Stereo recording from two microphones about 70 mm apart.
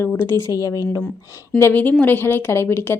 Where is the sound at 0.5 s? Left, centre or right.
Left.